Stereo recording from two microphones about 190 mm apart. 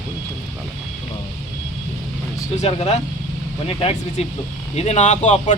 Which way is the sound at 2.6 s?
35° left (ahead or behind).